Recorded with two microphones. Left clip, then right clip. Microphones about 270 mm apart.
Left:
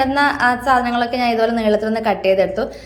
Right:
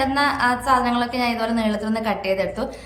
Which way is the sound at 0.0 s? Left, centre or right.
Centre.